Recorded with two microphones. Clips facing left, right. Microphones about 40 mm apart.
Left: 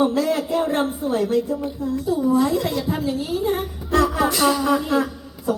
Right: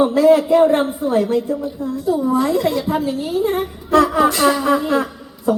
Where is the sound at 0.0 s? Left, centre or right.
Centre.